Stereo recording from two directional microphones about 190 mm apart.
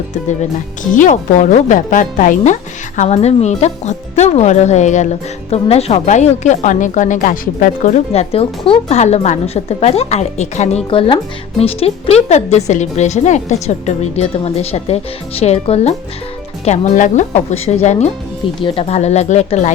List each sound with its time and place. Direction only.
0.9 s speech: 40° left (ahead or behind)